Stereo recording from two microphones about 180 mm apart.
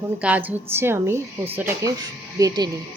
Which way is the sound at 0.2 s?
10° right (ahead or behind).